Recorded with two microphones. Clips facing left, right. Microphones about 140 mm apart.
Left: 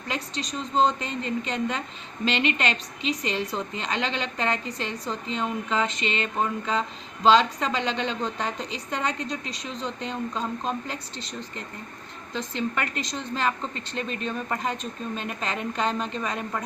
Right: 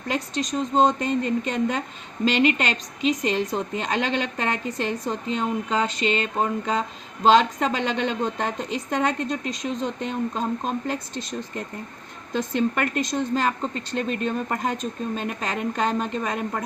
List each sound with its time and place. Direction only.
0.1 s a woman's voice: 45° right (ahead or behind)